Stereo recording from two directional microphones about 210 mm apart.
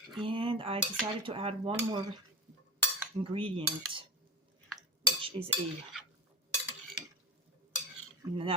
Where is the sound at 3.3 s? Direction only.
25° right (ahead or behind).